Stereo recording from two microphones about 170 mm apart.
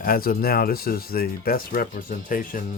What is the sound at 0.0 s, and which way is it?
Speech, 60° left (ahead or behind).